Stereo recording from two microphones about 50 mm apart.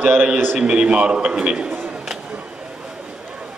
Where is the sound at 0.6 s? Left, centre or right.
Centre.